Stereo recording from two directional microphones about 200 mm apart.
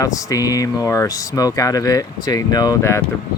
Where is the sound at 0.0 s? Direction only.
15° left (ahead or behind).